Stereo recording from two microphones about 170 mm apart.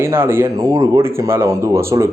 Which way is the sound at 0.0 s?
15° right (ahead or behind).